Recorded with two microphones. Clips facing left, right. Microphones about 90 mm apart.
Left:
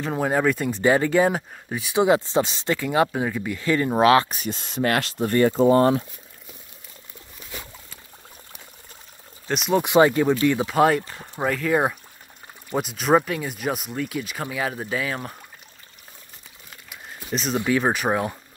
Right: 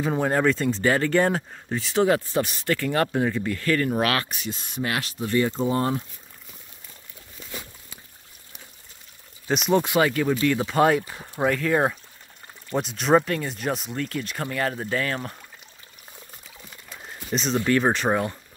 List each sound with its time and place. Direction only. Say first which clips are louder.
0.0 s speech: even; centre (ahead or behind)
3.5 s speech: left 5 dB; 15° left (ahead or behind)
4.5 s speech: left 5 dB; 65° left (ahead or behind)
9.5 s speech: right 1 dB; centre (ahead or behind)
9.8 s speech: left 5 dB; 25° left (ahead or behind)
10.6 s speech: left 1 dB; centre (ahead or behind)
17.3 s speech: even; centre (ahead or behind)